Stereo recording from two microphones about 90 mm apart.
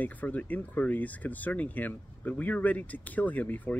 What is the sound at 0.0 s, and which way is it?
Speech, 20° left (ahead or behind).